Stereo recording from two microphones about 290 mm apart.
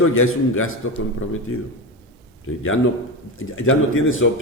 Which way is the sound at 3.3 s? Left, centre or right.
Left.